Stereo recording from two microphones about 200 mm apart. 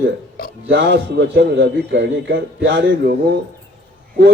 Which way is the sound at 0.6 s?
60° right (ahead or behind).